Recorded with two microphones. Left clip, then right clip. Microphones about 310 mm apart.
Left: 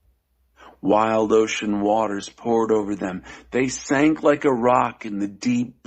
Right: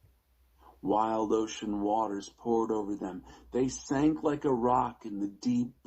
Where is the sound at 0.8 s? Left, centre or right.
Left.